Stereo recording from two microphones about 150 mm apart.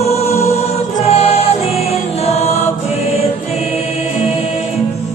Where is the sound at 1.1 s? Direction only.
40° left (ahead or behind).